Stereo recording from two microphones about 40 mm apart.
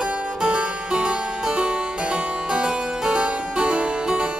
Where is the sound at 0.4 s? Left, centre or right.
Right.